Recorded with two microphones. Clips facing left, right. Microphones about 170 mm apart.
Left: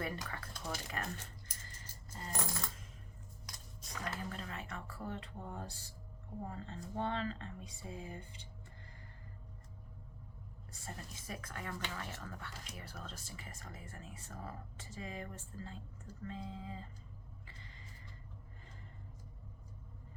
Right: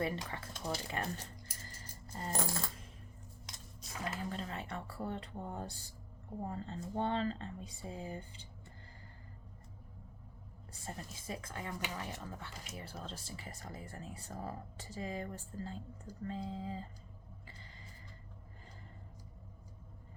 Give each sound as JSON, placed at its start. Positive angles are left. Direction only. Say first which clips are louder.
{"t": 0.0, "sound": "speech", "louder": "right 4 dB", "side_deg": -25}
{"t": 1.6, "sound": "coin", "louder": "right 3 dB", "side_deg": -35}
{"t": 3.5, "sound": "music", "louder": "even", "side_deg": -25}
{"t": 4.3, "sound": "speech", "louder": "right 4 dB", "side_deg": -30}
{"t": 10.8, "sound": "speech", "louder": "right 3 dB", "side_deg": -25}